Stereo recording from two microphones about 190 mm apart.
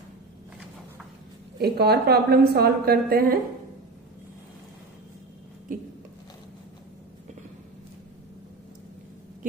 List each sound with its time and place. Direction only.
1.6 s a woman's voice: 55° right (ahead or behind)